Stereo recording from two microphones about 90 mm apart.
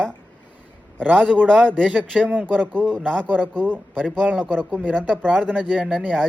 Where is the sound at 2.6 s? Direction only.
10° left (ahead or behind).